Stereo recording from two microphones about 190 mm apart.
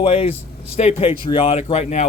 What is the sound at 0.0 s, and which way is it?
Speech, 30° left (ahead or behind).